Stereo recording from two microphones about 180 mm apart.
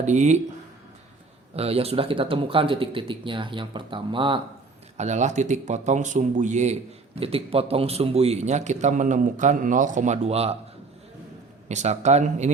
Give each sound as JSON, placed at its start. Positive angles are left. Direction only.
{"t": 0.0, "sound": "a man's voice", "side_deg": -40}
{"t": 1.5, "sound": "speech", "side_deg": -35}
{"t": 4.9, "sound": "a man's voice", "side_deg": -40}
{"t": 11.7, "sound": "a man's voice", "side_deg": -40}